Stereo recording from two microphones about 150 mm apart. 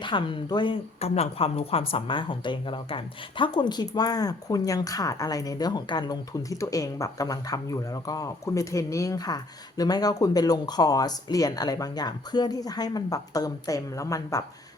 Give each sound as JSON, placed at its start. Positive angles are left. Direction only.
{"t": 0.0, "sound": "speech", "side_deg": 30}